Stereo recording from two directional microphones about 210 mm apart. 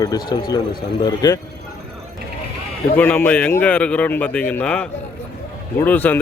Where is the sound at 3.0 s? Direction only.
5° left (ahead or behind).